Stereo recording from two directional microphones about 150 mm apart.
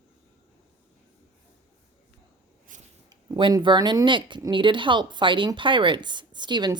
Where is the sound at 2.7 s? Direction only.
60° right (ahead or behind).